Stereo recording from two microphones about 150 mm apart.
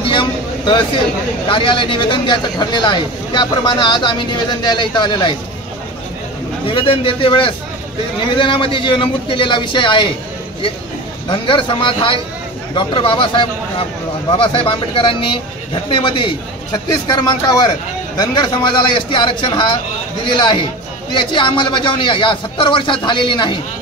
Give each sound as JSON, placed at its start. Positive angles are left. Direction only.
{"t": 0.1, "sound": "vehicle", "side_deg": 30}
{"t": 1.5, "sound": "speech", "side_deg": 35}
{"t": 6.7, "sound": "speech", "side_deg": 35}
{"t": 11.2, "sound": "a man's voice", "side_deg": 35}